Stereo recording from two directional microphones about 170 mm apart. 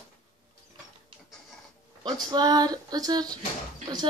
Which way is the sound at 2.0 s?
25° right (ahead or behind).